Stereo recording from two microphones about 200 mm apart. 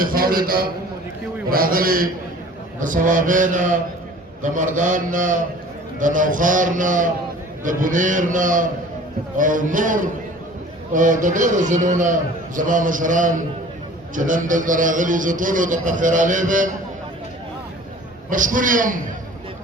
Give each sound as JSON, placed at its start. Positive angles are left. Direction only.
{"t": 0.0, "sound": "a man's voice", "side_deg": -45}
{"t": 18.3, "sound": "a man's voice", "side_deg": -40}